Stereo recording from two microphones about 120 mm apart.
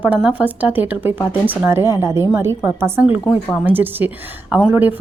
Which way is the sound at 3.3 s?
Centre (ahead or behind).